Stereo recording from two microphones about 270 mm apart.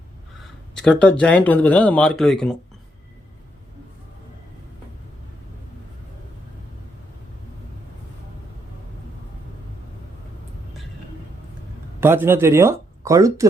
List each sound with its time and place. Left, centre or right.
0.8 s speech: centre
11.9 s speech: centre